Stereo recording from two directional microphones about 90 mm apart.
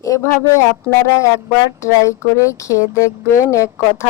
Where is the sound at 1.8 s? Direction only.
35° left (ahead or behind).